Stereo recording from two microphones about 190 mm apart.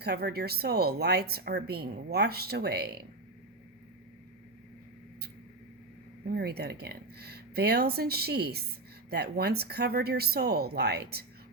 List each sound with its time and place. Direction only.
0.0 s a woman's voice: 55° right (ahead or behind)
6.2 s a woman's voice: 55° right (ahead or behind)